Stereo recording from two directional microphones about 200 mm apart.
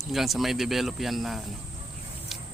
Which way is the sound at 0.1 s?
Centre (ahead or behind).